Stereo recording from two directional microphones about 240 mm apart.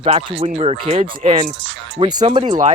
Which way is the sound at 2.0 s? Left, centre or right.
Centre.